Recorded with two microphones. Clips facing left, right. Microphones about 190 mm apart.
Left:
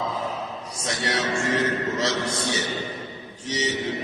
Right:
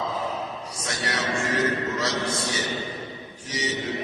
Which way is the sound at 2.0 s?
25° left (ahead or behind).